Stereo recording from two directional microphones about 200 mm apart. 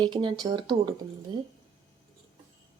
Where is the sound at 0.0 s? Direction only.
20° right (ahead or behind).